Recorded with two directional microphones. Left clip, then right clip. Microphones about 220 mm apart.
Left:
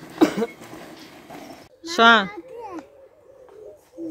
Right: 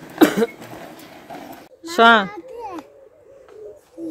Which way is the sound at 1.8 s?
5° right (ahead or behind).